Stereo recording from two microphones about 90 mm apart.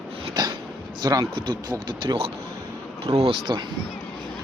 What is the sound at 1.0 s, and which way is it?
Speech, 45° right (ahead or behind).